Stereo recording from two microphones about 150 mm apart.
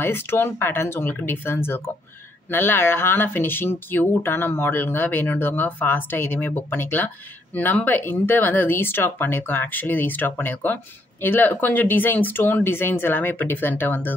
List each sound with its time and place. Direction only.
0.0 s speech: 15° left (ahead or behind)